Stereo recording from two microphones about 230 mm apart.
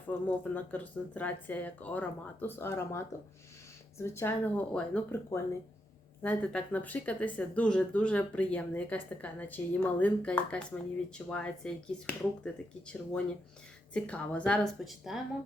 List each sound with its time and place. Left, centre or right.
0.3 s speech: centre
13.9 s speech: centre